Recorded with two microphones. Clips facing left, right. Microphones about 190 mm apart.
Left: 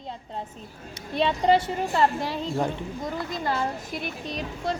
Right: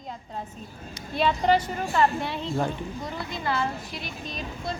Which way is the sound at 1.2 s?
25° left (ahead or behind).